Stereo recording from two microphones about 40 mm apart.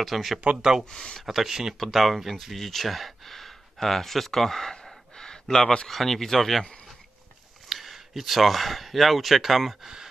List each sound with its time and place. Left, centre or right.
0.0 s speech: centre
0.6 s speech: centre
0.8 s speech: centre
1.2 s speech: centre; by 5.9 s left
5.9 s speech: centre
7.7 s speech: centre